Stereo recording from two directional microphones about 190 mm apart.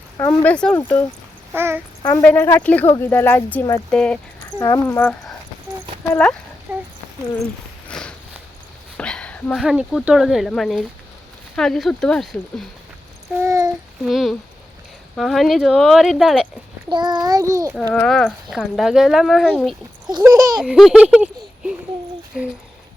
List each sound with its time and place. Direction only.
0.2 s speech: 10° left (ahead or behind)
1.5 s speech: 10° right (ahead or behind)
2.2 s speech: 10° left (ahead or behind)
4.6 s speech: 20° left (ahead or behind)
6.7 s horse: 5° right (ahead or behind)
7.9 s walk: 5° left (ahead or behind)
9.0 s speech: 5° left (ahead or behind)
13.4 s speech: 15° right (ahead or behind)
14.0 s speech: centre (ahead or behind)
16.9 s a child's voice: 25° right (ahead or behind)
17.9 s speech: 5° left (ahead or behind)
20.1 s a child's voice: 20° right (ahead or behind)
20.7 s speech: 5° right (ahead or behind)